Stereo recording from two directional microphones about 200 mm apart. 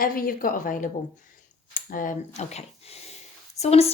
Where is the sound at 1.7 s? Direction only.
40° left (ahead or behind).